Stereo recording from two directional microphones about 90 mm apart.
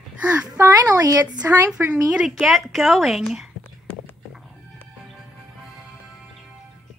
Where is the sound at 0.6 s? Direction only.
40° right (ahead or behind).